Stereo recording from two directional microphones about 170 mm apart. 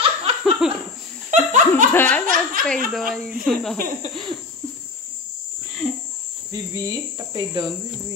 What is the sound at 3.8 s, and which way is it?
Speech, 50° right (ahead or behind).